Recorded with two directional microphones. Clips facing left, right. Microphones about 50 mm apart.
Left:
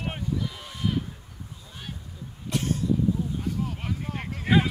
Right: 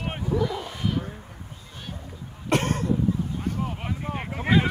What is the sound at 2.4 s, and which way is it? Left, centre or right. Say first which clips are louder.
Cough: right 4 dB; right.